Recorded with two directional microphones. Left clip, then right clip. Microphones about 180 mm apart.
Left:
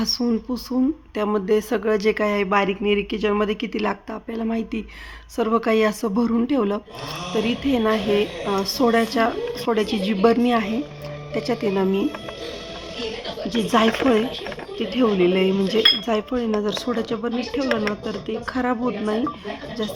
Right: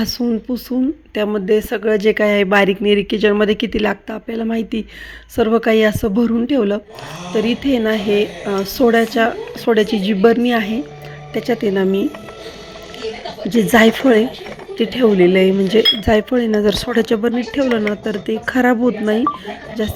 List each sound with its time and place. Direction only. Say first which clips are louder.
0.0 s a woman's voice: right 3 dB; 15° right (ahead or behind)
1.1 s dishes: right 5 dB; 10° right (ahead or behind)
5.4 s a woman's voice: right 6 dB; 15° right (ahead or behind)
13.5 s dishes: right 7 dB; 25° right (ahead or behind)